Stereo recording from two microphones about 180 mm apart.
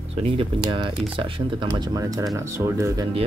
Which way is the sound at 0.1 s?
30° right (ahead or behind).